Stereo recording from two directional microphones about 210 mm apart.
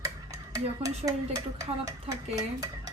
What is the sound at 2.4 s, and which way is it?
Dishes, 15° right (ahead or behind).